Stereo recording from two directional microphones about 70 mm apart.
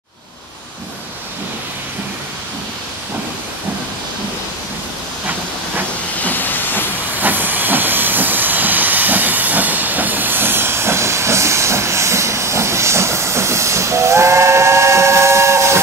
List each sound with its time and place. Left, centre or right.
6.2 s hiss: left
7.2 s hiss: right